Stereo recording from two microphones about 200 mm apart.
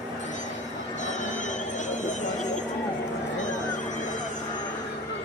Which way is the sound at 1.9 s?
35° left (ahead or behind).